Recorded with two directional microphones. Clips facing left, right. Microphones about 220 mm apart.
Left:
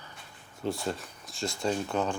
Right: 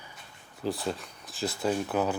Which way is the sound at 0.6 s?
Centre (ahead or behind).